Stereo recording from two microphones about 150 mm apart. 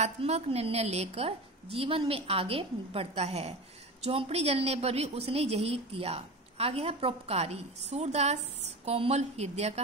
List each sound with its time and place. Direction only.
0.0 s a woman's voice: 45° right (ahead or behind)